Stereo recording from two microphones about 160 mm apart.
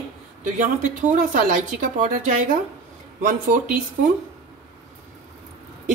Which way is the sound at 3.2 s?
55° right (ahead or behind).